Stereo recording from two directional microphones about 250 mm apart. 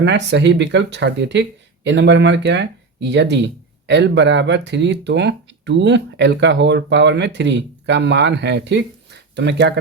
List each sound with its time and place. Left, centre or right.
0.0 s speech: right